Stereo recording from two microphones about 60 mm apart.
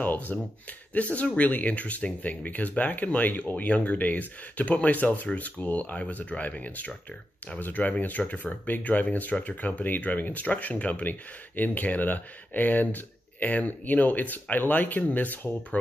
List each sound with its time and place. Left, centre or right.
0.0 s speech: left